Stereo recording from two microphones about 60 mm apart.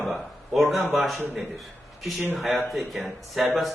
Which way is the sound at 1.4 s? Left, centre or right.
Centre.